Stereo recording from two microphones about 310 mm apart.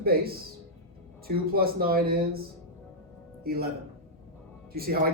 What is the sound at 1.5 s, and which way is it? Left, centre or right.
Speech, right.